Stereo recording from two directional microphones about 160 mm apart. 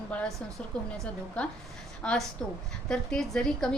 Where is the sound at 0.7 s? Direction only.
5° left (ahead or behind).